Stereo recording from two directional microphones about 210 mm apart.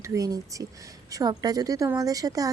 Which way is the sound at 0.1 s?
15° right (ahead or behind).